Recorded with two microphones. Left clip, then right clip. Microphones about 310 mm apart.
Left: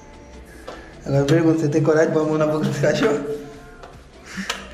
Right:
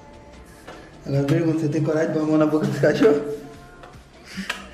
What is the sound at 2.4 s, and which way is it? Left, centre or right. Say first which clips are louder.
Speech: even; centre.